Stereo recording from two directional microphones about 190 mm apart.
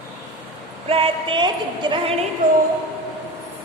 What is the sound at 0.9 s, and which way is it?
Music, 30° right (ahead or behind).